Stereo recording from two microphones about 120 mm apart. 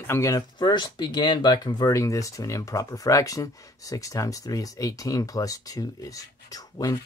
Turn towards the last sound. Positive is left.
turn(degrees=30)  # may be behind; listen again after turning